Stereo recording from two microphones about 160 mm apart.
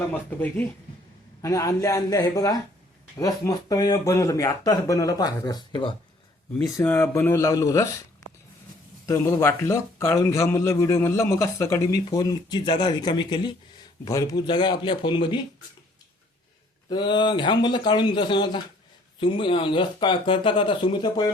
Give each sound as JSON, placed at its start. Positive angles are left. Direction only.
{"t": 0.3, "sound": "a man's voice", "side_deg": 10}
{"t": 6.7, "sound": "speech", "side_deg": 15}
{"t": 9.0, "sound": "a man's voice", "side_deg": 15}
{"t": 16.9, "sound": "a man's voice", "side_deg": 30}